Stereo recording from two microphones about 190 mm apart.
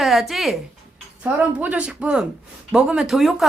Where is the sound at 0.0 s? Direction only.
Centre (ahead or behind).